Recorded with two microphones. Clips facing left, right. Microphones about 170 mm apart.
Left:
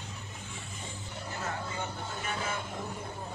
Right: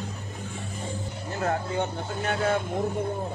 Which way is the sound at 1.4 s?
60° right (ahead or behind).